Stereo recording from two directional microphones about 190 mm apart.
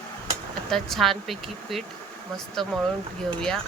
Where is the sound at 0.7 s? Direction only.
Centre (ahead or behind).